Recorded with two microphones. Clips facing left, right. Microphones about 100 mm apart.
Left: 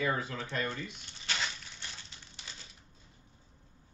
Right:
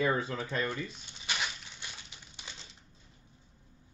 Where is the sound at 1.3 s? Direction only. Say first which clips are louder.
Right 1 dB; 15° right (ahead or behind).